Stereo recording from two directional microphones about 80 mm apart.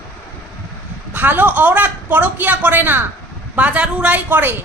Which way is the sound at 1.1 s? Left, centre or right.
Right.